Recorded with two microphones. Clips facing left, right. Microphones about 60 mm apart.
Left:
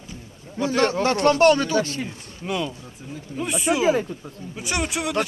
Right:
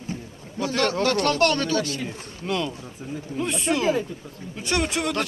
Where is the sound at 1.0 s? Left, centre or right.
Left.